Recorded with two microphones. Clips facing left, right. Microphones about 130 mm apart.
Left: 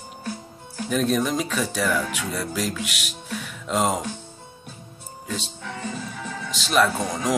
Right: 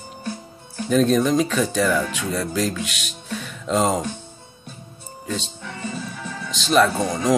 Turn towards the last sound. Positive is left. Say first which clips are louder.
# right 3 dB
turn(degrees=5)  # may be behind; listen again after turning